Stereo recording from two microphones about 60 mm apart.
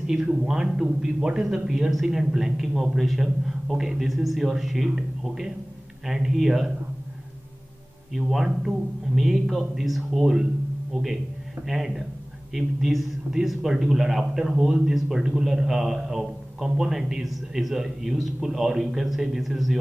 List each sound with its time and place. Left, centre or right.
0.0 s a man's voice: centre
8.1 s a man's voice: centre